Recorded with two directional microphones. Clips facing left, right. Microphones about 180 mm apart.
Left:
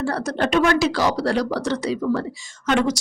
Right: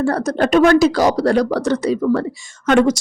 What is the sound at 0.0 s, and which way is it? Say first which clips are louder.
A woman's voice: right 5 dB; 45° right (ahead or behind).